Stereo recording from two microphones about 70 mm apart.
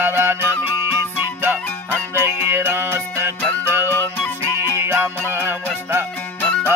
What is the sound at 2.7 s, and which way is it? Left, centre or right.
Music, right.